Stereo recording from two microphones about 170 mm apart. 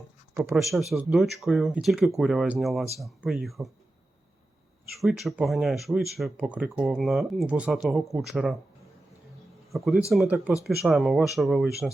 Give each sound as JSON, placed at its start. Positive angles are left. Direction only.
{"t": 0.5, "sound": "speech", "side_deg": 0}
{"t": 4.9, "sound": "speech", "side_deg": 0}
{"t": 9.7, "sound": "speech", "side_deg": 0}